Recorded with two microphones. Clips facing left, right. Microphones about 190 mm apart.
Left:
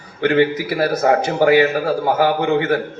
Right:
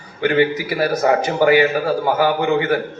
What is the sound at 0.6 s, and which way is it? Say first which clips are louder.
A man's voice: left 1 dB; 55° left (ahead or behind).